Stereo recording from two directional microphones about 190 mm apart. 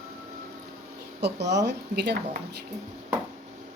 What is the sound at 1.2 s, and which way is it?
Speech, 65° right (ahead or behind).